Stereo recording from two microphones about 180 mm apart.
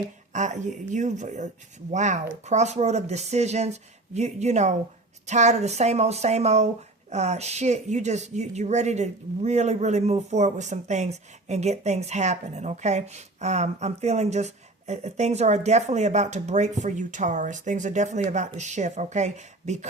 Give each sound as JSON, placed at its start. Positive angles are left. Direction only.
{"t": 0.3, "sound": "speech", "side_deg": -40}